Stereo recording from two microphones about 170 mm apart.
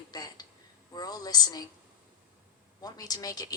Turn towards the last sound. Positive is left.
turn(degrees=20)  # may be behind; listen again after turning